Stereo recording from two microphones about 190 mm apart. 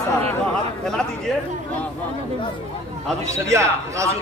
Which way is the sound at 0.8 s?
5° left (ahead or behind).